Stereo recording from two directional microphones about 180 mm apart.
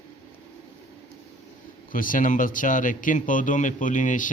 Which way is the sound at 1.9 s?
50° left (ahead or behind).